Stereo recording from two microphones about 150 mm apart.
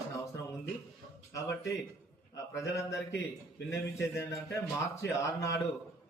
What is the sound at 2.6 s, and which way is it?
A man's voice, 20° left (ahead or behind).